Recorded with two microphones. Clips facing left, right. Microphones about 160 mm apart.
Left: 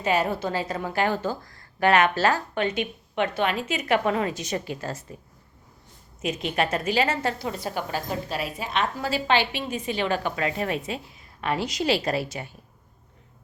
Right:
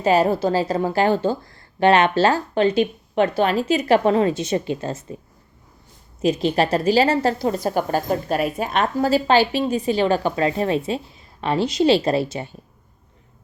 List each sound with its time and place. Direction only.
0.0 s a woman's voice: 35° right (ahead or behind)
6.2 s a woman's voice: 35° right (ahead or behind)